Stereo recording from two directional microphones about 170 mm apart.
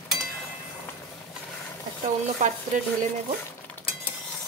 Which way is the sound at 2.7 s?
50° right (ahead or behind).